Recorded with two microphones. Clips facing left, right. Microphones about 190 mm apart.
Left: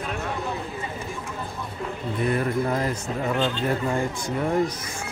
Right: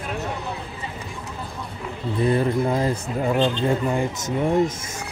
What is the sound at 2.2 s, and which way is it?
Speech, 25° right (ahead or behind).